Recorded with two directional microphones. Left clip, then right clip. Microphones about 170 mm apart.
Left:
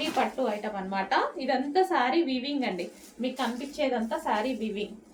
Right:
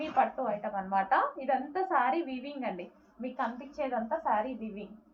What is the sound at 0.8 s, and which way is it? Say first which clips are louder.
A woman's voice: even; 40° left (ahead or behind).